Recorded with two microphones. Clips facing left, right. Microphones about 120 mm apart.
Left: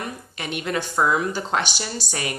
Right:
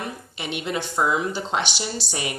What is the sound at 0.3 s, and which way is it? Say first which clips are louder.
A woman's voice: left 1 dB; 20° right (ahead or behind).